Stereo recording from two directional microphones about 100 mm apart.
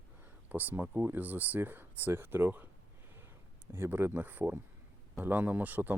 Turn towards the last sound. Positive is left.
turn(degrees=-15)  # may be behind; listen again after turning